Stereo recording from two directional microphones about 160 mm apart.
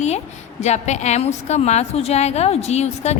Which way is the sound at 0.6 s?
45° left (ahead or behind).